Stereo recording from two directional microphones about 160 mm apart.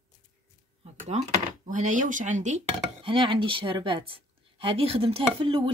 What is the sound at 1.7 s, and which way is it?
Speech, 50° right (ahead or behind).